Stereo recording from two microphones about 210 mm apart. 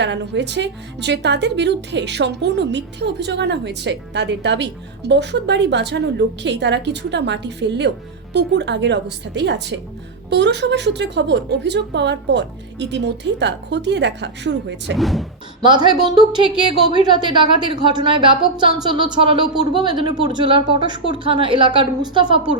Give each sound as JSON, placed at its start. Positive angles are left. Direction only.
{"t": 0.0, "sound": "speech", "side_deg": -55}
{"t": 14.9, "sound": "speech", "side_deg": 0}
{"t": 15.6, "sound": "speech", "side_deg": -20}